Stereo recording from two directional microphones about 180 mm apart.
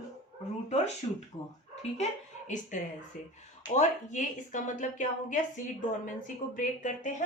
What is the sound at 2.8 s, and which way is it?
A woman's voice, 50° left (ahead or behind).